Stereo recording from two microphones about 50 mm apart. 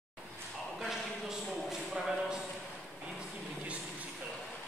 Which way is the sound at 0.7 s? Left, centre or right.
Centre.